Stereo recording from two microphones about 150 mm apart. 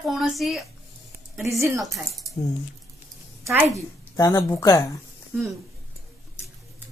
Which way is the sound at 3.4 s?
15° right (ahead or behind).